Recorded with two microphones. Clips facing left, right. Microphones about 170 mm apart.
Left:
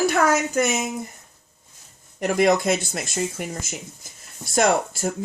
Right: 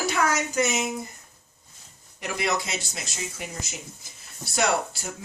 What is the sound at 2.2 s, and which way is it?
Speech, 50° left (ahead or behind).